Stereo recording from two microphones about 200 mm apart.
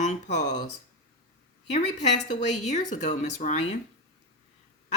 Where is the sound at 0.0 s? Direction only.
35° left (ahead or behind).